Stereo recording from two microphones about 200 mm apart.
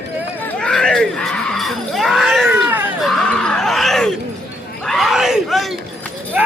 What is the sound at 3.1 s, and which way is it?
Screaming, 5° left (ahead or behind).